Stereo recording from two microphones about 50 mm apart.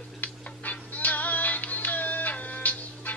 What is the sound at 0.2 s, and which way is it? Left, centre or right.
Music, left.